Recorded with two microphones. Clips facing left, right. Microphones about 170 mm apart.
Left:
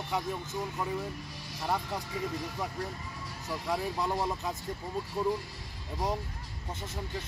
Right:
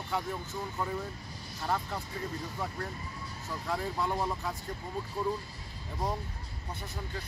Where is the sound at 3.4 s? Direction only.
15° left (ahead or behind).